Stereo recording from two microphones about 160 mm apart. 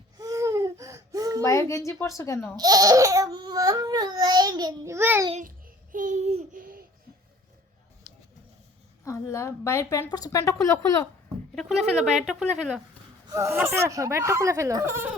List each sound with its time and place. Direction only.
0.2 s baby cry: 20° right (ahead or behind)
1.4 s a child's voice: 20° left (ahead or behind)
2.6 s speech: 25° right (ahead or behind)
5.3 s a child's voice: 60° right (ahead or behind)
8.1 s bird: 50° left (ahead or behind)
9.0 s a woman's voice: 20° left (ahead or behind)
12.1 s a woman's voice: 5° right (ahead or behind)
13.2 s speech: 20° right (ahead or behind)